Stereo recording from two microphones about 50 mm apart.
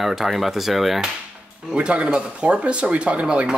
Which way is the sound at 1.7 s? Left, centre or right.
Right.